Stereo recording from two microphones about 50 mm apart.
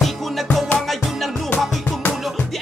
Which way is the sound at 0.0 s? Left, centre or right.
Centre.